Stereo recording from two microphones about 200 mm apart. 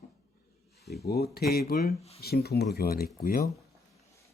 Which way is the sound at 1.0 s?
50° left (ahead or behind).